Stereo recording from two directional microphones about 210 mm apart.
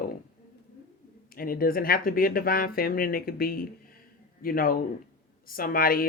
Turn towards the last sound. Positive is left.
turn(degrees=45)  # may be behind; listen again after turning